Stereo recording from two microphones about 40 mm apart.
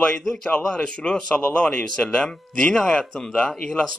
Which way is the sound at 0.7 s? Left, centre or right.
Left.